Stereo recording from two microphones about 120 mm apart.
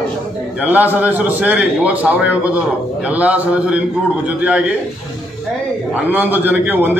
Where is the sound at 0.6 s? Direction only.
15° right (ahead or behind).